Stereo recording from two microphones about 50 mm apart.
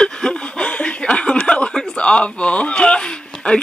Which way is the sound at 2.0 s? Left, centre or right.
Left.